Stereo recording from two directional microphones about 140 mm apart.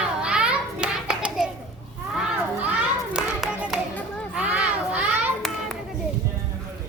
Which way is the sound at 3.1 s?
5° right (ahead or behind).